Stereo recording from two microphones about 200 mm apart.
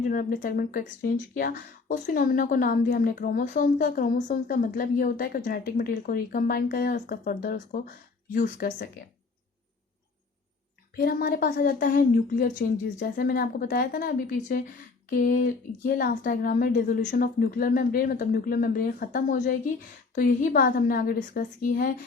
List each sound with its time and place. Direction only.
0.0 s speech: 45° left (ahead or behind)
10.9 s speech: 50° left (ahead or behind)